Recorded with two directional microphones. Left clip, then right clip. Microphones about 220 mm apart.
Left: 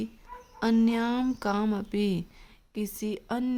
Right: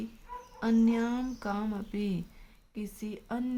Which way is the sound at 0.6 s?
50° left (ahead or behind).